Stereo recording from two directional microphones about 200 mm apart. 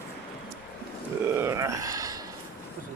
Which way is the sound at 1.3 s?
15° right (ahead or behind).